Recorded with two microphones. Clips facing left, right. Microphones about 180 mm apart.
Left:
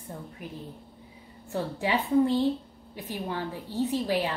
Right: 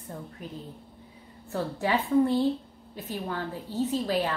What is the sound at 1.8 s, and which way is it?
A woman's voice, 15° left (ahead or behind).